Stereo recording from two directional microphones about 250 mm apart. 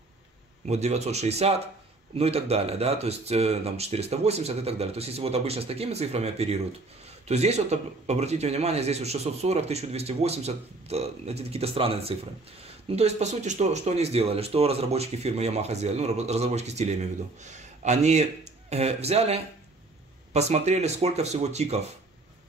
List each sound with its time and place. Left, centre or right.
0.7 s speech: right